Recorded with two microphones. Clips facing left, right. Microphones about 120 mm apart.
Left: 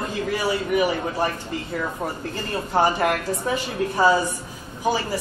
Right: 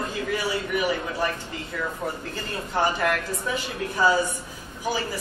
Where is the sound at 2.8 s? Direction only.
40° left (ahead or behind).